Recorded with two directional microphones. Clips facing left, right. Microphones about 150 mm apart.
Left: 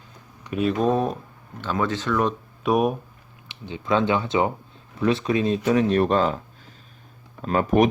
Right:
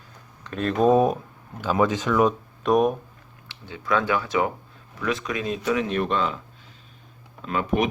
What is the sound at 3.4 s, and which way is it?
Speech, 20° left (ahead or behind).